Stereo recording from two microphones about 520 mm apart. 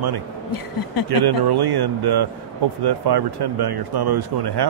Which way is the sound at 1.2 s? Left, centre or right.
Right.